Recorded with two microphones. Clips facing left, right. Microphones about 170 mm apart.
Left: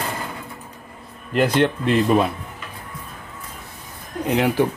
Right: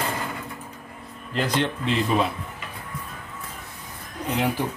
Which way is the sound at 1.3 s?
60° left (ahead or behind).